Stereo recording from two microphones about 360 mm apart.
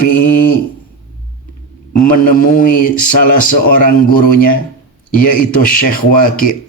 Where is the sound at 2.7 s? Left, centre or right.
Left.